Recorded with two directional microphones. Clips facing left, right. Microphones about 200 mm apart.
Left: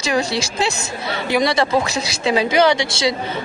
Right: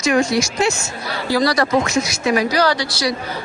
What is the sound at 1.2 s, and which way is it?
A man's voice, 20° left (ahead or behind).